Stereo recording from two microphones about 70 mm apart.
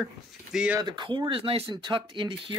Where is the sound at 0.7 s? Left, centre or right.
Right.